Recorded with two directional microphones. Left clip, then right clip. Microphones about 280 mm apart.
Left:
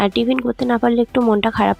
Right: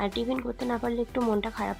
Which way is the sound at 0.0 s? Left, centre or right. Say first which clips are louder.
Left 12 dB; left.